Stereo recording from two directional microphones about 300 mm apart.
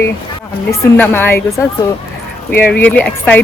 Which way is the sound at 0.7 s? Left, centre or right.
Centre.